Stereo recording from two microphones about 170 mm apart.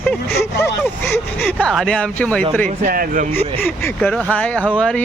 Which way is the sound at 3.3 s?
10° left (ahead or behind).